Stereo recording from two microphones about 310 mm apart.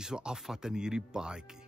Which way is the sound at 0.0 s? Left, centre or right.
Centre.